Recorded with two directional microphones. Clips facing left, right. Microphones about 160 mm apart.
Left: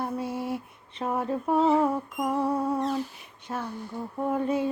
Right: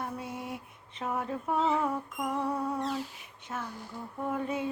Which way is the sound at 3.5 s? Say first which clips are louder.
Left 5 dB; 35° left (ahead or behind).